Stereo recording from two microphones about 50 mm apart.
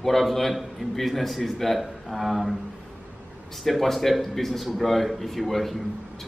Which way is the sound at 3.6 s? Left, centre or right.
Centre.